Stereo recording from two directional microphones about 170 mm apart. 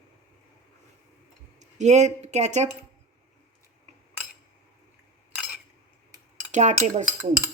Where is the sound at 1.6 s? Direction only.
45° right (ahead or behind).